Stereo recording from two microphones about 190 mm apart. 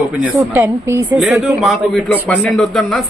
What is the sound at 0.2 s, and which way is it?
Speech, 15° right (ahead or behind).